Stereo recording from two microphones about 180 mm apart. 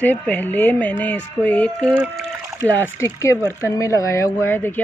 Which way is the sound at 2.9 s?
15° left (ahead or behind).